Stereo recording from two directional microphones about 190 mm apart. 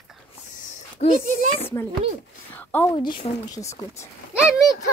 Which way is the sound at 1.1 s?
40° right (ahead or behind).